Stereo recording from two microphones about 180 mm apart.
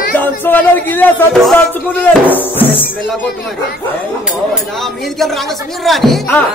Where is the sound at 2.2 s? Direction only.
10° left (ahead or behind).